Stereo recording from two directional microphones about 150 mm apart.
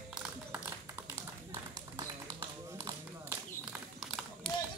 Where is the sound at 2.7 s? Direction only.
20° right (ahead or behind).